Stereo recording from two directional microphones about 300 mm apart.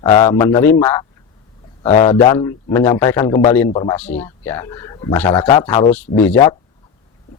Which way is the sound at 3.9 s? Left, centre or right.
Centre.